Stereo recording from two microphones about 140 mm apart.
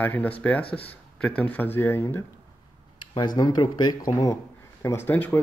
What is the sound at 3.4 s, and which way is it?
Speech, 30° left (ahead or behind).